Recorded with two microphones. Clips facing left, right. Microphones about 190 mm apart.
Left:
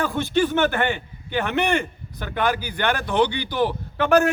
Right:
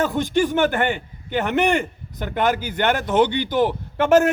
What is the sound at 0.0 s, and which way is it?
A man's voice, 15° right (ahead or behind).